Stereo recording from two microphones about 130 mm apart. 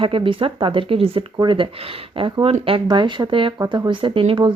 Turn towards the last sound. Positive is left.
turn(degrees=-40)  # may be behind; listen again after turning